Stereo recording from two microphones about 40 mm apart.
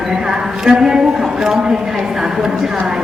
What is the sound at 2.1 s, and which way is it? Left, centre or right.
Speech, centre.